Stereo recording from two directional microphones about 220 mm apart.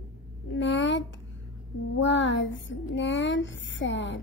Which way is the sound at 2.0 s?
55° left (ahead or behind).